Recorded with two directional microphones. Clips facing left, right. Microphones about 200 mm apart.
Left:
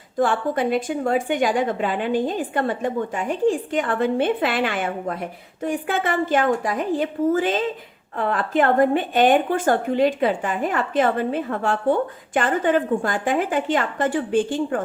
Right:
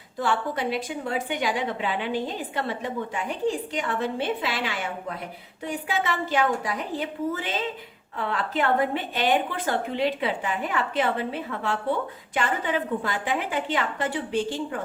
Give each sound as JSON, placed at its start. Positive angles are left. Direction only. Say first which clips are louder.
{"t": 0.2, "sound": "a woman's voice", "louder": "left 6 dB", "side_deg": 50}